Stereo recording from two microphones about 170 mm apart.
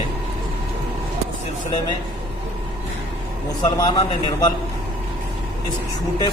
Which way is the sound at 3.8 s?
20° left (ahead or behind).